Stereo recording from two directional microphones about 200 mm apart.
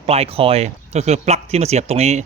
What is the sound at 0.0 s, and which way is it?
Speech, 30° right (ahead or behind).